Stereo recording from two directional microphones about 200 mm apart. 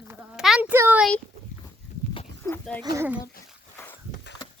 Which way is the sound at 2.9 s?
5° right (ahead or behind).